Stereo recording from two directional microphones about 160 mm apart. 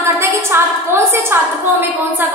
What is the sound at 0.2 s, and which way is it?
A woman's voice, 15° right (ahead or behind).